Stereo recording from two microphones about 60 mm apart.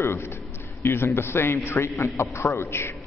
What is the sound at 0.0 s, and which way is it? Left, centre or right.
A man's voice, left.